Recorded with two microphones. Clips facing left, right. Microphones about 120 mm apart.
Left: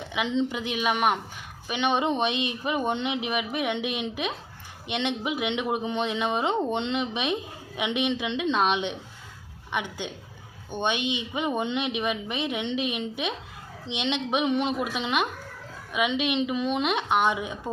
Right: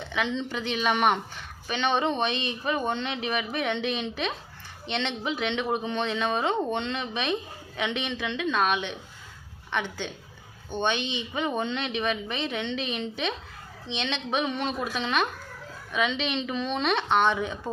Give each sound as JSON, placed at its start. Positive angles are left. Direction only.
{"t": 0.1, "sound": "speech", "side_deg": 15}